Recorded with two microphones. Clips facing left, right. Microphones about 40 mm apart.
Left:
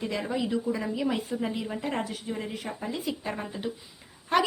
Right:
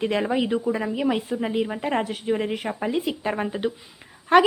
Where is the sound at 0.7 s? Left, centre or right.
Right.